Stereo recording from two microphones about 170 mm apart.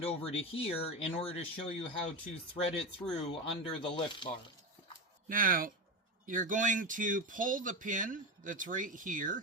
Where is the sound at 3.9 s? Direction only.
30° left (ahead or behind).